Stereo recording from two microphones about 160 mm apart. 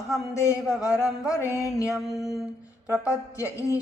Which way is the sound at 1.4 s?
20° left (ahead or behind).